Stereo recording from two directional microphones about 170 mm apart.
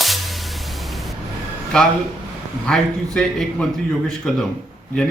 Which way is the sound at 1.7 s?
5° left (ahead or behind).